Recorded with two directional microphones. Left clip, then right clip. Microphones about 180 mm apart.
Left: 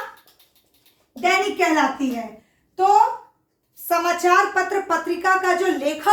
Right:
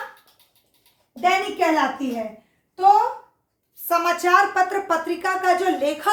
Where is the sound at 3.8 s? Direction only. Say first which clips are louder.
Left 1 dB; 20° right (ahead or behind).